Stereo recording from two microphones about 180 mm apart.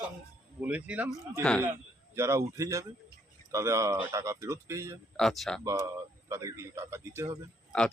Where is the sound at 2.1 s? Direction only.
15° right (ahead or behind).